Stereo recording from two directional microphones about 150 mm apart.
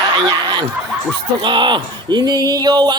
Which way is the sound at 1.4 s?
30° right (ahead or behind).